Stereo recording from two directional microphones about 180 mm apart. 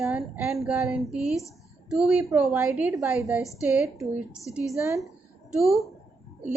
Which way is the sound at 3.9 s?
15° right (ahead or behind).